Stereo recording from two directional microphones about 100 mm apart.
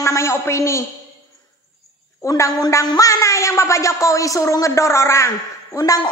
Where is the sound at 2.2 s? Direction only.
35° left (ahead or behind).